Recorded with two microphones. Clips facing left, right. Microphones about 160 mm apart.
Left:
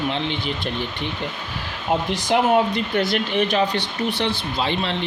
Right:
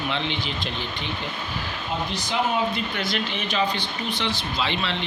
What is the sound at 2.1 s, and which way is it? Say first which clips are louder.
Speech: left 7 dB; 90° left.